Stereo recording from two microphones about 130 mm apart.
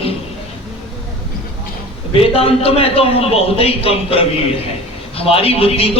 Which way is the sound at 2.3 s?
45° left (ahead or behind).